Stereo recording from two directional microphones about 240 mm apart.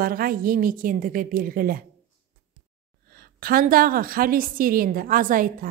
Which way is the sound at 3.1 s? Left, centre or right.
Right.